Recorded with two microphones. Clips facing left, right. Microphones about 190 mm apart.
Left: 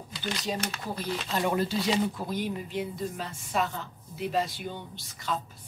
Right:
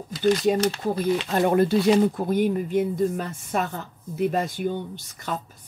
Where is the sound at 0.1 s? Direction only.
50° right (ahead or behind).